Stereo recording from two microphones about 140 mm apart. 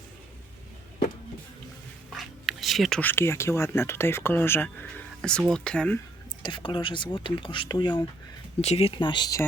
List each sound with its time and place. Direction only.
2.1 s a sound: centre (ahead or behind)
3.0 s speech: 15° left (ahead or behind)
6.4 s speech: 35° left (ahead or behind)
8.6 s speech: 45° left (ahead or behind)